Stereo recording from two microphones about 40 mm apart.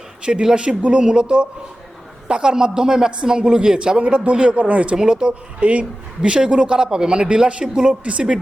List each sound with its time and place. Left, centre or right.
0.5 s a man's voice: right
4.0 s a man's voice: right